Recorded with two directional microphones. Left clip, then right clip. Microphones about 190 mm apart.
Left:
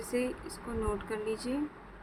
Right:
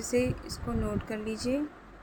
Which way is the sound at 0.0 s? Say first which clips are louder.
Right 4 dB; 20° right (ahead or behind).